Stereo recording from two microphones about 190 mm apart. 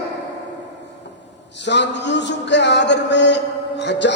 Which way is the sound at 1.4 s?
65° left (ahead or behind).